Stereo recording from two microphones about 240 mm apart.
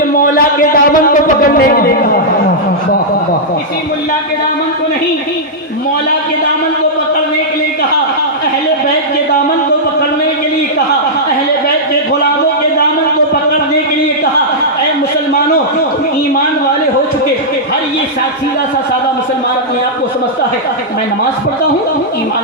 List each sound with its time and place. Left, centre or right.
0.2 s music: left